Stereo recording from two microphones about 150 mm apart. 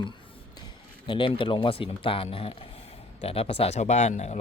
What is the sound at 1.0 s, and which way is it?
Speech, 35° left (ahead or behind).